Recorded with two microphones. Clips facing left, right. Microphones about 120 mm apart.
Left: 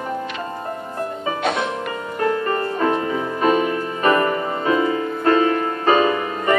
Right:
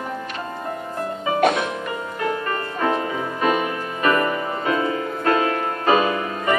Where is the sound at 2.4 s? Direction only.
30° left (ahead or behind).